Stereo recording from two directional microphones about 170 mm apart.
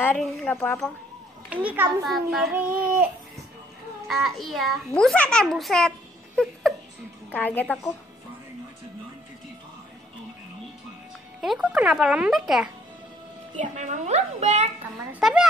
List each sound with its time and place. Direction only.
0.2 s a woman's voice: 10° left (ahead or behind)
1.5 s a child's voice: 10° right (ahead or behind)
4.1 s a child's voice: centre (ahead or behind)
11.4 s a child's voice: 5° right (ahead or behind)
13.6 s a child's voice: 45° right (ahead or behind)
15.1 s a child's voice: 5° right (ahead or behind)